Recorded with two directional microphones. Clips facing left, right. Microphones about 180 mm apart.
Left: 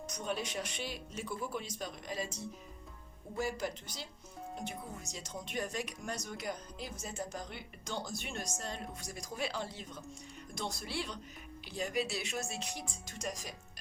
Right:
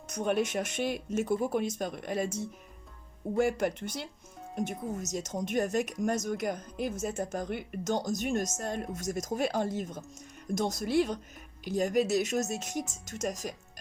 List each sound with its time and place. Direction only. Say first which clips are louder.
0.1 s speech: right 10 dB; 55° right (ahead or behind)
4.5 s speech: right 11 dB; 50° right (ahead or behind)